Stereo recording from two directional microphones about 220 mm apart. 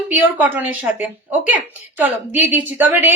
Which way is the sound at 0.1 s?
10° right (ahead or behind).